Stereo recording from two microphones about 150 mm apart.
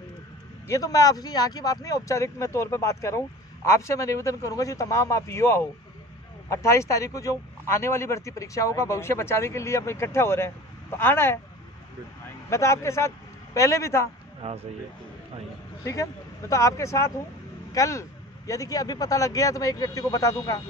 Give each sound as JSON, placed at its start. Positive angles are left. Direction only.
{"t": 0.7, "sound": "a man's voice", "side_deg": 25}
{"t": 12.4, "sound": "speech", "side_deg": 20}
{"t": 14.4, "sound": "speech", "side_deg": -40}
{"t": 15.8, "sound": "a man's voice", "side_deg": 20}